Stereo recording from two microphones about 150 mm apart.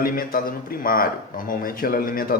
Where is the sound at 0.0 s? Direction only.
70° left (ahead or behind).